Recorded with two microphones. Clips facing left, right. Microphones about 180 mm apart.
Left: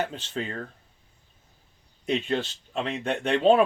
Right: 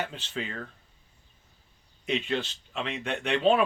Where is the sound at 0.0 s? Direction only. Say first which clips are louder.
Left 4 dB; 40° left (ahead or behind).